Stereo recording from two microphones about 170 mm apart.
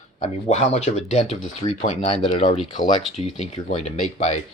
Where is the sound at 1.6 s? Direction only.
30° left (ahead or behind).